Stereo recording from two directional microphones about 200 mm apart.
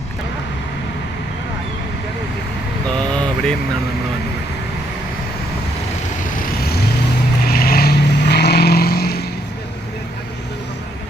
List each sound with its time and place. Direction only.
6.6 s vehicle: 50° left (ahead or behind)